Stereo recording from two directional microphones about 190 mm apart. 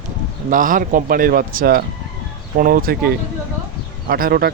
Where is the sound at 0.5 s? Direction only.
45° right (ahead or behind).